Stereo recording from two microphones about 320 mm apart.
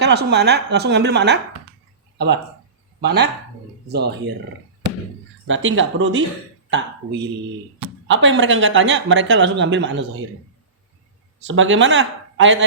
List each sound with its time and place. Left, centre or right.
0.0 s speech: right
5.5 s speech: right
11.4 s speech: right